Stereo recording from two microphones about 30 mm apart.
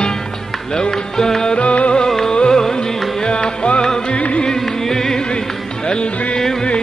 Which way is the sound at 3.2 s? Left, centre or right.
Left.